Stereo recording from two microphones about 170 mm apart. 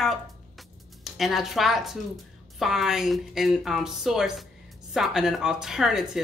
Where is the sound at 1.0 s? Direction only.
Centre (ahead or behind).